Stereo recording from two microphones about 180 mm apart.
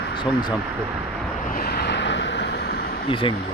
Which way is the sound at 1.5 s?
60° left (ahead or behind).